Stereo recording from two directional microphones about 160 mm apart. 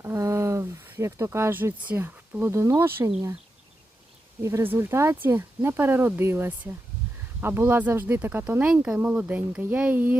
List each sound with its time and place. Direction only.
0.0 s speech: 20° right (ahead or behind)
4.4 s speech: 15° right (ahead or behind)